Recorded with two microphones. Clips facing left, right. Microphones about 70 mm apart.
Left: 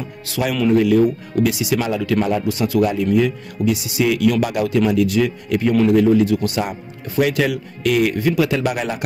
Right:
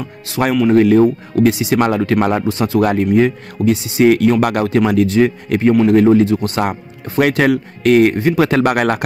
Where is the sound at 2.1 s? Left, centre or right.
Right.